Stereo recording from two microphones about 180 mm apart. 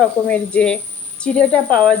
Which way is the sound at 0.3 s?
5° left (ahead or behind).